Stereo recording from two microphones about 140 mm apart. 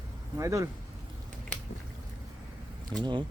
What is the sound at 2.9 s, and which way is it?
Speech, 35° right (ahead or behind).